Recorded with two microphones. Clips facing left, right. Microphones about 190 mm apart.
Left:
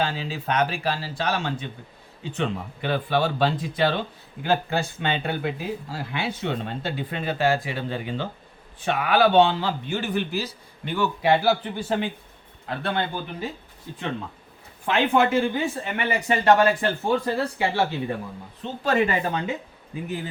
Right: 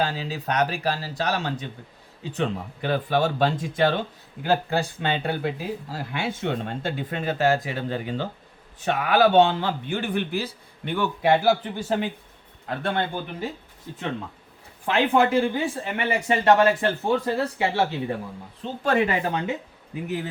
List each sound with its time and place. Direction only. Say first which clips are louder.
0.0 s speech: even; 40° right (ahead or behind)
14.8 s speech: even; 35° right (ahead or behind)
18.8 s speech: even; 60° right (ahead or behind)
19.9 s speech: right 2 dB; 70° right (ahead or behind)